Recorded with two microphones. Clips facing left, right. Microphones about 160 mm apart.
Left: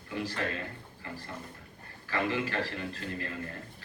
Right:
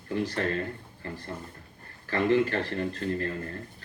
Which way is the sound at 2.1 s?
35° right (ahead or behind).